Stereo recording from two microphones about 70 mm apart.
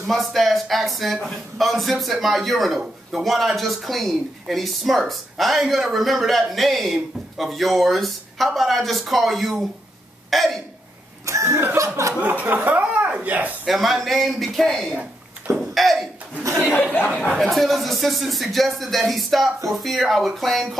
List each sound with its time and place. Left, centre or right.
0.0 s speech: centre
11.2 s chuckle: right
12.2 s speech: right
13.7 s speech: centre
17.4 s speech: centre